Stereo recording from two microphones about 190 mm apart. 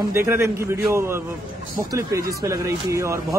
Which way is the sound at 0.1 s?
15° right (ahead or behind).